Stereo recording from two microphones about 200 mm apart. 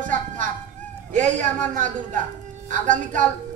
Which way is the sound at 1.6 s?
40° right (ahead or behind).